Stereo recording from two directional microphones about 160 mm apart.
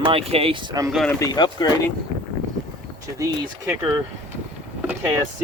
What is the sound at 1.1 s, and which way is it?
Speech, 20° left (ahead or behind).